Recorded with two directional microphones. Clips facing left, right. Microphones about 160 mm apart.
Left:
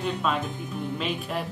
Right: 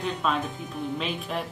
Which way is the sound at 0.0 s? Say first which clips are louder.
Even; centre (ahead or behind).